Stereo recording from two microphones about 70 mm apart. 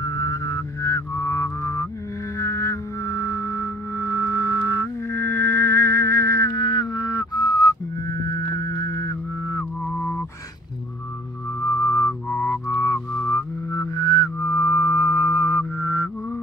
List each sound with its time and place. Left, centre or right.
0.0 s music: left
6.5 s music: left
9.8 s honk: left
11.6 s music: left
12.1 s music: left
13.3 s music: left